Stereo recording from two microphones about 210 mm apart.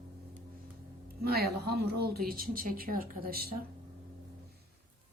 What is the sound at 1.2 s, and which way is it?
Speech, 50° right (ahead or behind).